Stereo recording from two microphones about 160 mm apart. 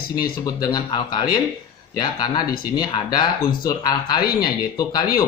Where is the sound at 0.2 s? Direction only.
25° left (ahead or behind).